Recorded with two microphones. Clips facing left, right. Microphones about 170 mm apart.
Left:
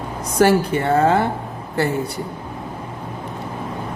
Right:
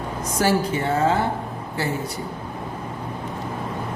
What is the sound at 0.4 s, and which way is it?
Speech, 65° left (ahead or behind).